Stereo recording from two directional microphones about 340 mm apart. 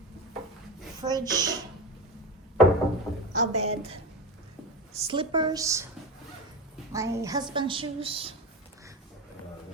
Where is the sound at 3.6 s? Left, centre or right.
Centre.